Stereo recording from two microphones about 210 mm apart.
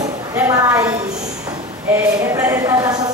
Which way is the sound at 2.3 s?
15° right (ahead or behind).